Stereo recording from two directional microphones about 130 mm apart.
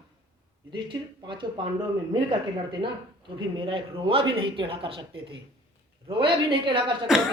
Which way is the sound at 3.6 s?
40° right (ahead or behind).